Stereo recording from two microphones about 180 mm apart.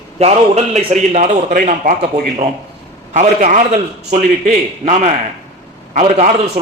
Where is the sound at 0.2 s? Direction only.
35° right (ahead or behind).